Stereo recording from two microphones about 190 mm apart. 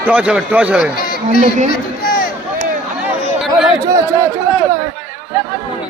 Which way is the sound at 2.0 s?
45° left (ahead or behind).